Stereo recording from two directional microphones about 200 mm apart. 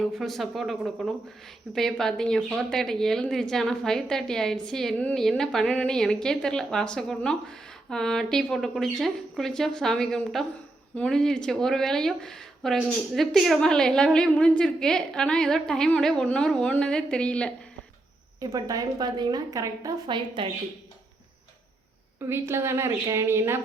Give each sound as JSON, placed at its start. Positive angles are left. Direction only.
{"t": 0.0, "sound": "speech", "side_deg": 0}
{"t": 18.3, "sound": "a woman's voice", "side_deg": -15}
{"t": 22.3, "sound": "a woman's voice", "side_deg": -10}